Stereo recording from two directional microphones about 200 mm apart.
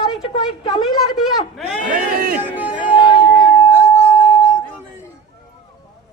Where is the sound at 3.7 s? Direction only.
10° right (ahead or behind).